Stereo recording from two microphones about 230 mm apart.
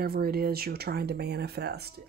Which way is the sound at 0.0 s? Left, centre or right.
Right.